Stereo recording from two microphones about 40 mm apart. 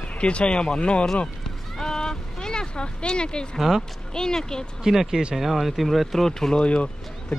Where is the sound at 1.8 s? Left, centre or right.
Centre.